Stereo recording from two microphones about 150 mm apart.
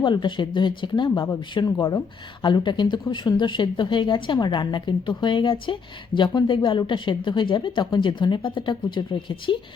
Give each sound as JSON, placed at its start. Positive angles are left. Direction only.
{"t": 0.0, "sound": "speech", "side_deg": 30}